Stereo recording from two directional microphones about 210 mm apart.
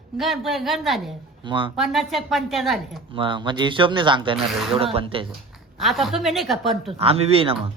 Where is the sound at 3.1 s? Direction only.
25° right (ahead or behind).